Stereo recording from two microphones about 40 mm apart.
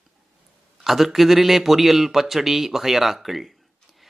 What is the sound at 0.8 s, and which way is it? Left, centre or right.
Speech, centre.